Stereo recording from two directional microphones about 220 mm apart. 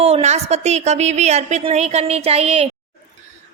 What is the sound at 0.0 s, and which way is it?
A woman's voice, 30° right (ahead or behind).